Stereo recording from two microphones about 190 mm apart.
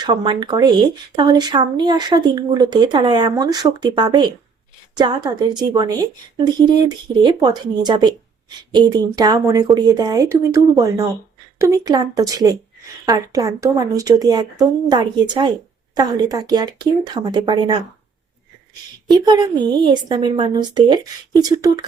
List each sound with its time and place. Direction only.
0.0 s speech: 25° right (ahead or behind)